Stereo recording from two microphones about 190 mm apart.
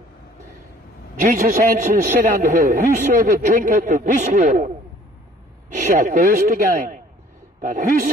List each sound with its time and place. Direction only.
1.2 s a man's voice: 45° right (ahead or behind)